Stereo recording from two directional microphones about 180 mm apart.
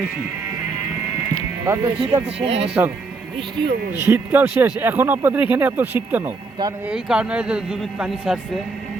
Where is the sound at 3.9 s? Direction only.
15° right (ahead or behind).